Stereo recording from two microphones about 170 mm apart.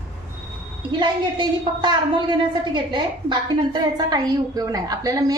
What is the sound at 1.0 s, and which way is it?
A woman's voice, 30° right (ahead or behind).